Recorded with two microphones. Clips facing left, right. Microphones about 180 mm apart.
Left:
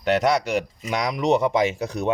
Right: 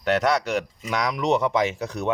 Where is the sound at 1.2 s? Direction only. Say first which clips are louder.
Left 3 dB; 40° left (ahead or behind).